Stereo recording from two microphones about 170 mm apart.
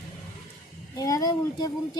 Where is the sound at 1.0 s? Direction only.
20° left (ahead or behind).